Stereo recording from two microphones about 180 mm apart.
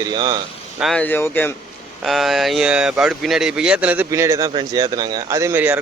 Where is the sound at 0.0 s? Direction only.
20° right (ahead or behind).